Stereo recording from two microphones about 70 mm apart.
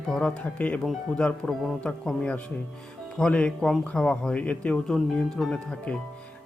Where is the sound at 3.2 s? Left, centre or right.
Centre.